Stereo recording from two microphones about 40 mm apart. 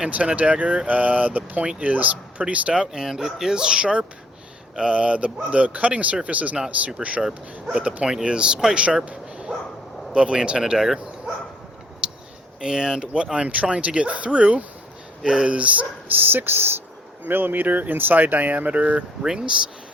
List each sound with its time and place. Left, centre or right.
0.1 s speech: right
2.4 s speech: right; by 3.5 s centre
3.5 s speech: centre
7.2 s speech: centre
10.1 s speech: right
12.0 s a sound: right
12.5 s speech: centre
15.2 s speech: centre
15.4 s speech: right
16.0 s speech: right
19.2 s speech: centre